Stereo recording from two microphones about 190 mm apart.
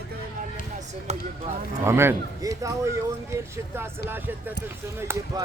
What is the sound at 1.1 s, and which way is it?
Speech, 35° right (ahead or behind).